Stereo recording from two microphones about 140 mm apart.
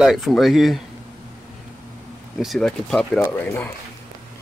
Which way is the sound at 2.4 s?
Centre (ahead or behind).